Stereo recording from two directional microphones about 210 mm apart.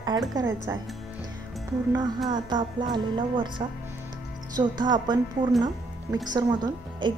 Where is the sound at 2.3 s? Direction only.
20° right (ahead or behind).